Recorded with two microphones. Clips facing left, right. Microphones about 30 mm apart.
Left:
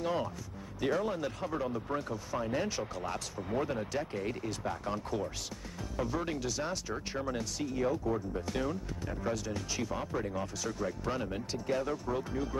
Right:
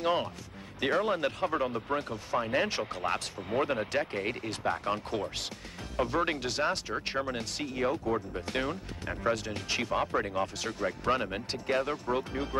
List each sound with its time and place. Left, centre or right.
0.0 s speech: right